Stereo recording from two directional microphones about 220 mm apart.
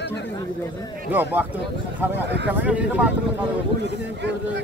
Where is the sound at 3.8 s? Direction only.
50° right (ahead or behind).